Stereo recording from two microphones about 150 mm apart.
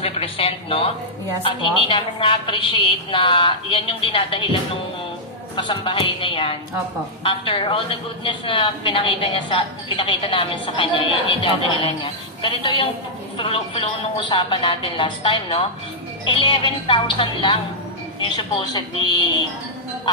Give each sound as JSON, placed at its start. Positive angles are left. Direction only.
{"t": 0.0, "sound": "a woman's voice", "side_deg": 40}
{"t": 5.6, "sound": "a woman's voice", "side_deg": 35}